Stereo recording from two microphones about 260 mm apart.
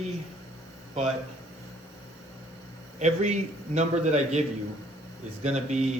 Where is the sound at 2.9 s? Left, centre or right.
Right.